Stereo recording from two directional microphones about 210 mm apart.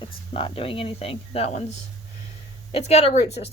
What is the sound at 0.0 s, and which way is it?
Speech, 25° left (ahead or behind).